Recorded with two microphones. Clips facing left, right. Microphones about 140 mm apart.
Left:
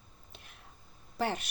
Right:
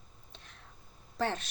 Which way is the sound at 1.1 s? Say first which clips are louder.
Even; 10° left (ahead or behind).